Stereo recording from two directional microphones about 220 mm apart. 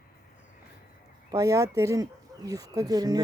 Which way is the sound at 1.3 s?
15° right (ahead or behind).